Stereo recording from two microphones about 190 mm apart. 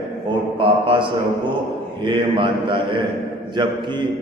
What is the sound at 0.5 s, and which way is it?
A man's voice, 25° right (ahead or behind).